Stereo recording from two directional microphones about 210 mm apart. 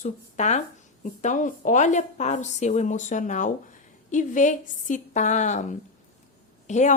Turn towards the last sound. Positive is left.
turn(degrees=35)  # may be behind; listen again after turning